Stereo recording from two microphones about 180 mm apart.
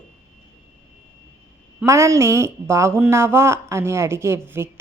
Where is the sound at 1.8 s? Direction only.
15° right (ahead or behind).